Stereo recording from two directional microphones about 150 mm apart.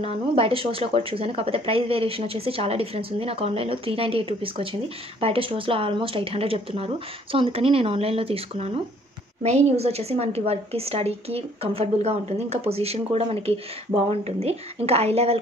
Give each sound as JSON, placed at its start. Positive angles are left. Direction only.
{"t": 0.0, "sound": "a woman's voice", "side_deg": -40}